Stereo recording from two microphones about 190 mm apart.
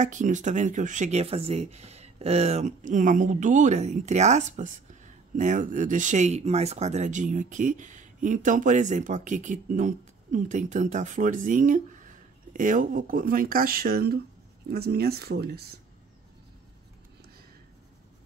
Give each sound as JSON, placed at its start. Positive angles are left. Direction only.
{"t": 0.0, "sound": "speech", "side_deg": -40}